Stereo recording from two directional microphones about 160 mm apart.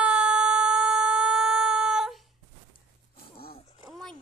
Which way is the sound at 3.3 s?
70° left (ahead or behind).